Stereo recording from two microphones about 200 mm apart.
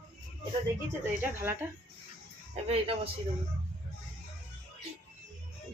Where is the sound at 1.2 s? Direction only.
10° right (ahead or behind).